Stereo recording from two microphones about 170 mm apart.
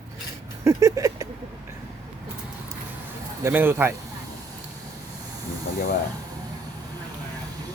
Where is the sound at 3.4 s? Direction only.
10° right (ahead or behind).